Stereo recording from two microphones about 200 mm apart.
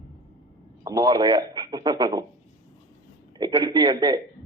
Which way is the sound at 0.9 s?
20° right (ahead or behind).